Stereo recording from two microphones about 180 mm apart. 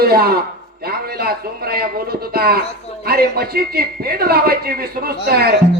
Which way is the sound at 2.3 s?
60° right (ahead or behind).